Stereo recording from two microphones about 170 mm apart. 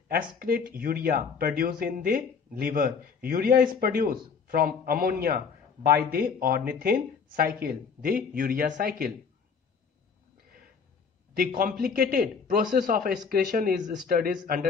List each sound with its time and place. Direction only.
0.1 s speech: 60° right (ahead or behind)
11.3 s speech: 60° right (ahead or behind)